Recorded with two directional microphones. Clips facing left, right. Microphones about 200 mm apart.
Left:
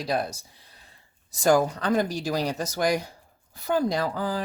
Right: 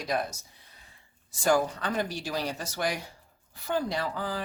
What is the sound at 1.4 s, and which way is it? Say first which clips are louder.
Speech: left 4 dB; 40° left (ahead or behind).